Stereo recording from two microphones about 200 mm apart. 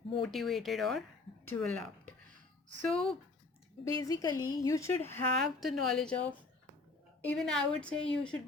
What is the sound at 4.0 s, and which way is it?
A woman's voice, 15° left (ahead or behind).